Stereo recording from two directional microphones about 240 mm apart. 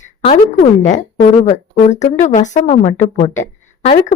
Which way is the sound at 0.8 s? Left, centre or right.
Left.